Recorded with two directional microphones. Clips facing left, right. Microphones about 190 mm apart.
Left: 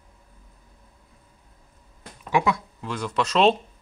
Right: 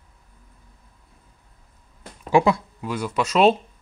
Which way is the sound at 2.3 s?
30° right (ahead or behind).